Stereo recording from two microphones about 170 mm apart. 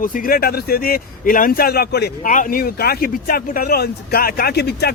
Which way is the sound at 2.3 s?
55° left (ahead or behind).